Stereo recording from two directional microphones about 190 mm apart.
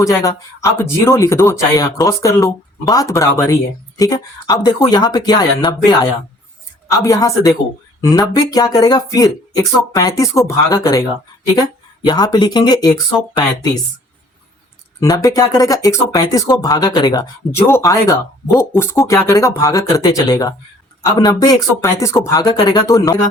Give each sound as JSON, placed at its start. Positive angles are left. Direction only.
{"t": 0.0, "sound": "speech", "side_deg": 15}
{"t": 7.0, "sound": "speech", "side_deg": 15}
{"t": 12.0, "sound": "speech", "side_deg": 20}
{"t": 15.1, "sound": "speech", "side_deg": 20}